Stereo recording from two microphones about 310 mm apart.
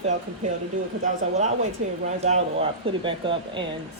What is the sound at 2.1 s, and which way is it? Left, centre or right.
Speech, right.